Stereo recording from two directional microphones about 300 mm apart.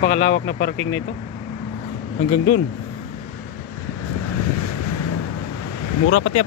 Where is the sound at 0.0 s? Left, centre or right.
Left.